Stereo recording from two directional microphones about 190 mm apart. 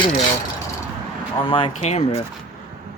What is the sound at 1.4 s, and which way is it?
Speech, 25° left (ahead or behind).